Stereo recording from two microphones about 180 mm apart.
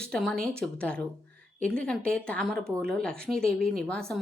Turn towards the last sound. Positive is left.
turn(degrees=5)  # may be behind; listen again after turning